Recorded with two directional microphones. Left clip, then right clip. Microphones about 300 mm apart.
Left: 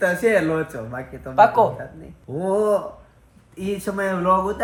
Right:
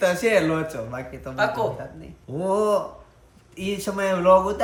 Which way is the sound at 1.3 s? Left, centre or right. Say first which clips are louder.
Left 9 dB; centre.